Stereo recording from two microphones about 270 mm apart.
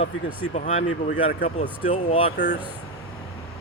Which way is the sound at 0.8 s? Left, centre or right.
Left.